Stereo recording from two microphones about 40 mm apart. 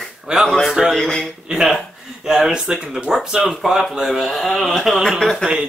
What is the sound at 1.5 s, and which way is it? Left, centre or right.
Speech, centre.